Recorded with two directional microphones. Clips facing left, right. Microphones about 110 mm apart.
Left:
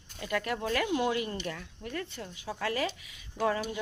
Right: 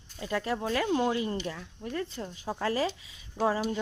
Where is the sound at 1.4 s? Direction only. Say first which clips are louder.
Right 2 dB; 10° right (ahead or behind).